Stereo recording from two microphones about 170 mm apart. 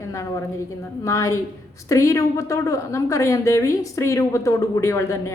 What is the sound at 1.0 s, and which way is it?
A woman's voice, 15° left (ahead or behind).